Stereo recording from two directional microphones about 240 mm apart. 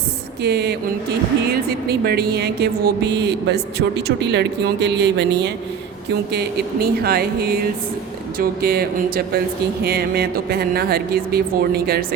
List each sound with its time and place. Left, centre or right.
0.4 s speech: right
1.9 s speech: right